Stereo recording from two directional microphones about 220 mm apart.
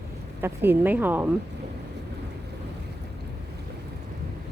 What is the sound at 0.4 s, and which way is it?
Speech, 10° right (ahead or behind).